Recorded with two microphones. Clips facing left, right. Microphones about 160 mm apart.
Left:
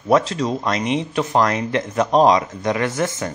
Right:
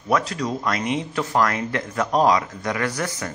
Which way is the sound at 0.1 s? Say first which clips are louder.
Left 5 dB; 25° left (ahead or behind).